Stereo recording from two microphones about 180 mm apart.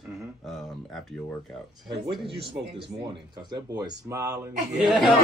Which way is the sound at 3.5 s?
25° right (ahead or behind).